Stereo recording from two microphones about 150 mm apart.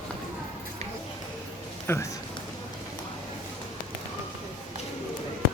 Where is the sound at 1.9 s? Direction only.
15° left (ahead or behind).